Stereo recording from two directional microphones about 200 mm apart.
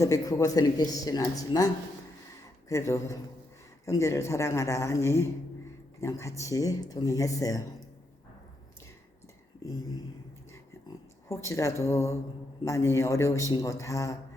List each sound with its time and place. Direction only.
0.0 s speech: 15° left (ahead or behind)
11.4 s speech: 15° left (ahead or behind)